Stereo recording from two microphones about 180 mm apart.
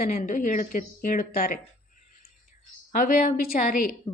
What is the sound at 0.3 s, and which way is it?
A woman's voice, 50° left (ahead or behind).